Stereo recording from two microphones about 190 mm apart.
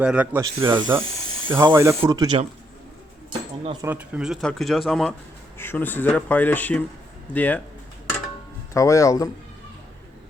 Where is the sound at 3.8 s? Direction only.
5° right (ahead or behind); by 7.6 s 10° left (ahead or behind).